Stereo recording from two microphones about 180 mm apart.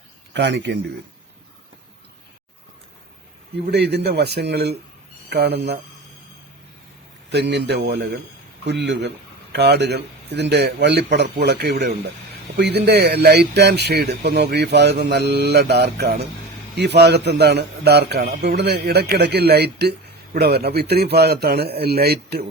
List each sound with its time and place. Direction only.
0.3 s speech: 75° right (ahead or behind)
3.7 s a man's voice: 65° right (ahead or behind)
7.3 s a man's voice: 70° right (ahead or behind)